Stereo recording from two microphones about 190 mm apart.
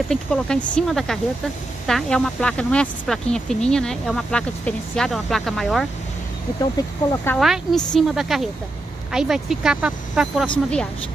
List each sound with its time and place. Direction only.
0.1 s speech: 5° left (ahead or behind)
6.6 s speech: 15° left (ahead or behind)
7.3 s speech: centre (ahead or behind)